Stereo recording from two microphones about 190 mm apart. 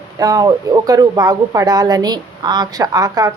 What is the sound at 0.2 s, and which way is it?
Speech, 20° right (ahead or behind).